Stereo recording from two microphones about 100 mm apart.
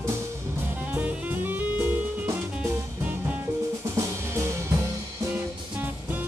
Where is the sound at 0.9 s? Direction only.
15° right (ahead or behind).